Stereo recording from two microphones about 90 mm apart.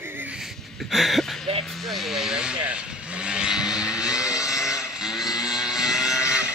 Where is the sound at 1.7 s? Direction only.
Centre (ahead or behind).